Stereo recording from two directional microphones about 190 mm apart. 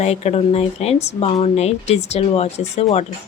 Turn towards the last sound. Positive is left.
turn(degrees=35)  # may be behind; listen again after turning